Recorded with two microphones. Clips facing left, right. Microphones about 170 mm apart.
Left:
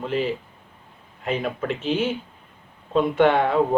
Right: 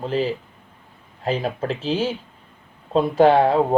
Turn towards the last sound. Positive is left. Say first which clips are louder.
# right 3 dB
turn(degrees=-35)  # may be behind; listen again after turning